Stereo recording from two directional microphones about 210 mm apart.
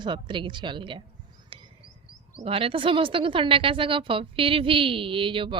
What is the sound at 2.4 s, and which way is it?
A woman's voice, 25° right (ahead or behind).